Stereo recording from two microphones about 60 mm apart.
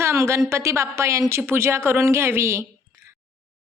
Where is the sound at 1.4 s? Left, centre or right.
Right.